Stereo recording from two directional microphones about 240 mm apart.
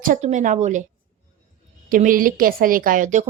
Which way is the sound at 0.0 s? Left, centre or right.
Right.